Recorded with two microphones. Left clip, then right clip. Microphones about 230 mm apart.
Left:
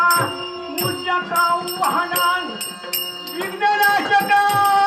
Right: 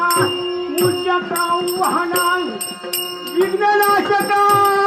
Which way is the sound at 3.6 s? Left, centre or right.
Left.